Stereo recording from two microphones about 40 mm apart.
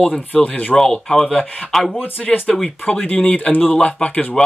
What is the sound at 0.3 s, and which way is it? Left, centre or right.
Speech, left.